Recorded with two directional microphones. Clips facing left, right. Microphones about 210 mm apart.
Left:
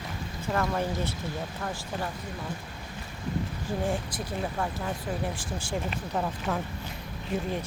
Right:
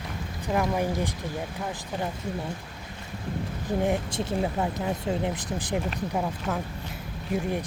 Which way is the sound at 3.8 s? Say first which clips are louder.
Right 5 dB; 20° right (ahead or behind).